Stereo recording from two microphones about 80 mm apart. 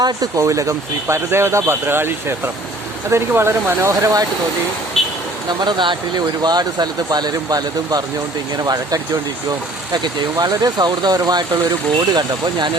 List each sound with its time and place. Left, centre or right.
0.0 s speech: right
5.0 s vehicle: centre
5.5 s speech: right